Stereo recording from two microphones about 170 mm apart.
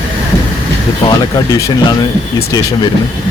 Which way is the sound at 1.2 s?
20° left (ahead or behind).